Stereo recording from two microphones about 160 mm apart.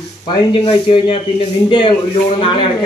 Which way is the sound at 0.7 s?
35° left (ahead or behind).